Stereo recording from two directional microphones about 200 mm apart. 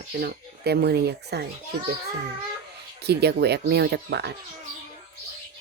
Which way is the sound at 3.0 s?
55° right (ahead or behind).